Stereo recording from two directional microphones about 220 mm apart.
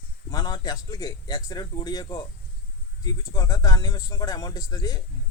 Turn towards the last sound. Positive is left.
turn(degrees=15)  # may be behind; listen again after turning